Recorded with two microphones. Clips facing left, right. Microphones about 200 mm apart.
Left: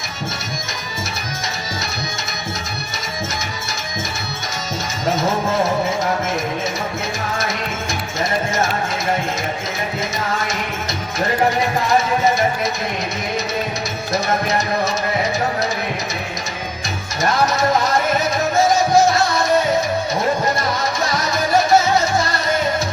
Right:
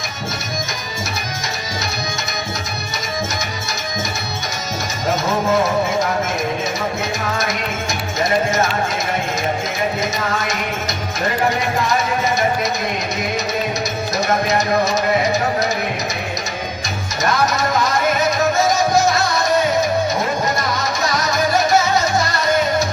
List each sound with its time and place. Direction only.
18.5 s music: 30° left (ahead or behind)